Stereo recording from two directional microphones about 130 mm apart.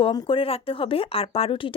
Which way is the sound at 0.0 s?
40° left (ahead or behind).